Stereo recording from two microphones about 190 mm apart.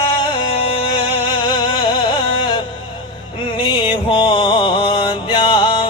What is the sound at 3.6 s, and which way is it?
Music, 25° left (ahead or behind).